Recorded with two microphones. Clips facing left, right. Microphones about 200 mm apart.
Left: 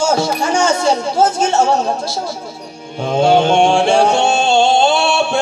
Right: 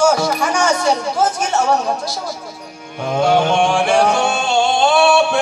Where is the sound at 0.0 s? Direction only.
25° left (ahead or behind).